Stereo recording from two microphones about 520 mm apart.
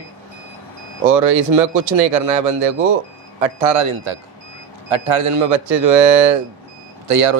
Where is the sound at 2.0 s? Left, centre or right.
Right.